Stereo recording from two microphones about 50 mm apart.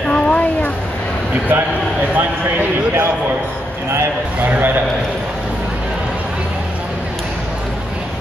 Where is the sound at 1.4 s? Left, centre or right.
Right.